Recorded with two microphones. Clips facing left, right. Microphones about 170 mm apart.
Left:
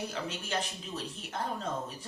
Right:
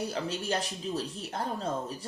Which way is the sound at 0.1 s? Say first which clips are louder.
Right 4 dB; 35° right (ahead or behind).